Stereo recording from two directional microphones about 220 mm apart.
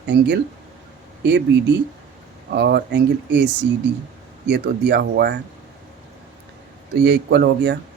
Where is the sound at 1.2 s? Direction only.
50° right (ahead or behind).